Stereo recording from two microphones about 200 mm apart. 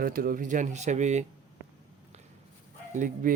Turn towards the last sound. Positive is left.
turn(degrees=-40)  # may be behind; listen again after turning